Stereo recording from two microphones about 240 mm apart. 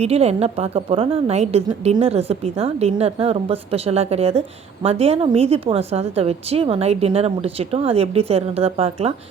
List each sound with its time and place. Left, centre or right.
0.0 s a woman's voice: right